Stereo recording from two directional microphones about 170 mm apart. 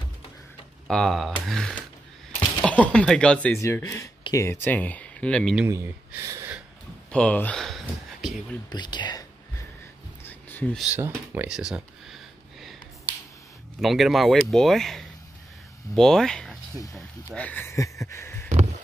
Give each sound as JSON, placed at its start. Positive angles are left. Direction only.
{"t": 0.8, "sound": "speech", "side_deg": 5}
{"t": 3.5, "sound": "speech", "side_deg": 15}
{"t": 5.7, "sound": "speech", "side_deg": -15}
{"t": 7.1, "sound": "speech", "side_deg": 5}
{"t": 8.6, "sound": "speech", "side_deg": 25}
{"t": 10.2, "sound": "a sound", "side_deg": 10}
{"t": 11.0, "sound": "speech", "side_deg": -10}
{"t": 13.7, "sound": "speech", "side_deg": 0}
{"t": 18.5, "sound": "a sound", "side_deg": -40}